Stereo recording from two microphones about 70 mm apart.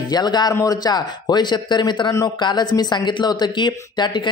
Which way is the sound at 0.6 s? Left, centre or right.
Left.